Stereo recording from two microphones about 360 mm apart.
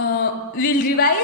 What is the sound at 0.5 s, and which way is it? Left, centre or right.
Speech, left.